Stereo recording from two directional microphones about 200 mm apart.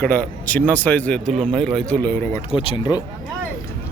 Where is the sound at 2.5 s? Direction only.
25° left (ahead or behind).